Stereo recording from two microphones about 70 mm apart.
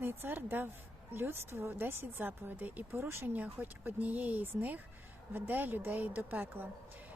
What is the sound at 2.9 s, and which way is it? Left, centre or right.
Speech, right.